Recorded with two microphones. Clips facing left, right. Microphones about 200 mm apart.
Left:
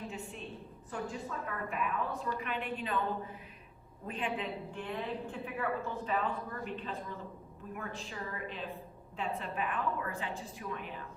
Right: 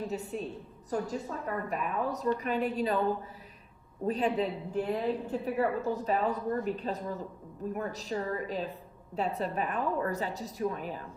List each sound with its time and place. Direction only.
0.1 s a woman's voice: 40° right (ahead or behind)
4.0 s a woman's voice: 40° right (ahead or behind)